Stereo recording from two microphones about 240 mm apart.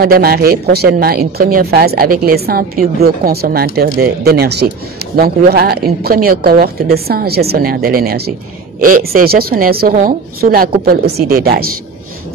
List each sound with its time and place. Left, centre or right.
0.0 s a man's voice: right